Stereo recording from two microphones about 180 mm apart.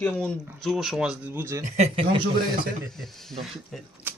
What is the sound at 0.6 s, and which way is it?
Speech, centre (ahead or behind).